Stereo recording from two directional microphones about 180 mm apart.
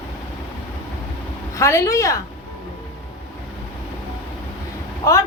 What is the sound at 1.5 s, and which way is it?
Speech, 15° left (ahead or behind).